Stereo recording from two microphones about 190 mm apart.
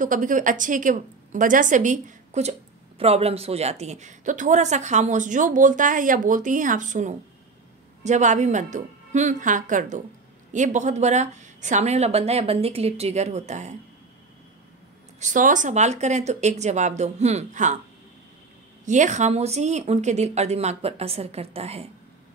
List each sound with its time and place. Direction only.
0.0 s a woman's voice: 45° right (ahead or behind)
15.1 s a woman's voice: 40° right (ahead or behind)
18.9 s a woman's voice: 40° right (ahead or behind)